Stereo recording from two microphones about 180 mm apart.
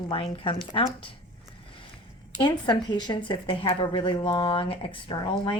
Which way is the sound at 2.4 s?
25° left (ahead or behind).